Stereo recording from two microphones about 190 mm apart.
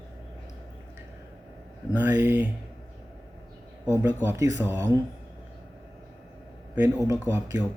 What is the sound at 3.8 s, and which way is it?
Speech, 15° right (ahead or behind).